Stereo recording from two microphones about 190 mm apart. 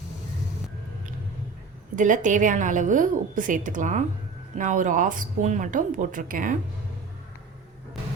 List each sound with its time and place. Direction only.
2.0 s a woman's voice: 40° right (ahead or behind)